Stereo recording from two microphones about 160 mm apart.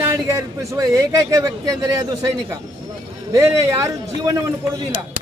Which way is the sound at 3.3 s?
20° right (ahead or behind).